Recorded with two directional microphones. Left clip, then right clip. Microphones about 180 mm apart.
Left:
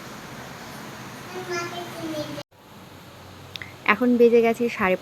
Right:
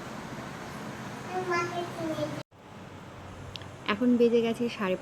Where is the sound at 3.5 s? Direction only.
10° left (ahead or behind).